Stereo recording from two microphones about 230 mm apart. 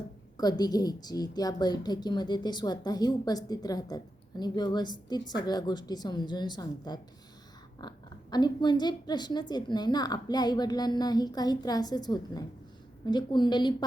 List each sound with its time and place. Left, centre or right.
0.3 s a woman's voice: centre